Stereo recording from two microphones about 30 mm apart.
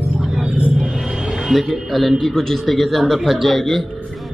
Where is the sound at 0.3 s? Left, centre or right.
Right.